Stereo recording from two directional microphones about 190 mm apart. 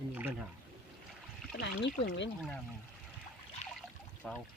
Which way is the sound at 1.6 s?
60° left (ahead or behind).